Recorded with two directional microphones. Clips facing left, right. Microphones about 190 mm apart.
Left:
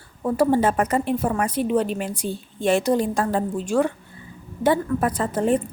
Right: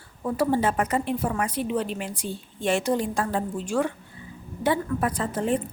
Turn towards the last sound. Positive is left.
turn(degrees=45)  # may be behind; listen again after turning